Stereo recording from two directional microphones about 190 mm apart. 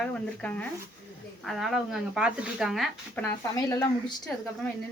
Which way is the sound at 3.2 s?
15° left (ahead or behind).